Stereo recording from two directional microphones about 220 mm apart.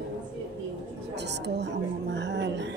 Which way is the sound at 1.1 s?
50° right (ahead or behind).